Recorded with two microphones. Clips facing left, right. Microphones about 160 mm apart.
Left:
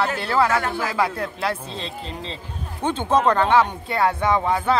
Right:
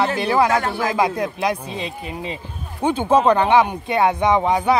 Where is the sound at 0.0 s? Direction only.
15° right (ahead or behind).